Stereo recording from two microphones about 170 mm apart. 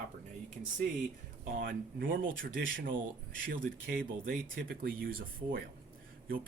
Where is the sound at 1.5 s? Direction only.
55° right (ahead or behind).